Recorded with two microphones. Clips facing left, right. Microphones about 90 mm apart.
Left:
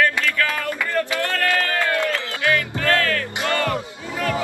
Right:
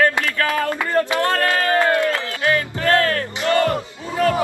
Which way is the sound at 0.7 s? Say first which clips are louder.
Right 4 dB; 35° right (ahead or behind).